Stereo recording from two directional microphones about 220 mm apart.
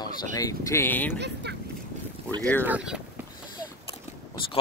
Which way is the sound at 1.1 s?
50° right (ahead or behind).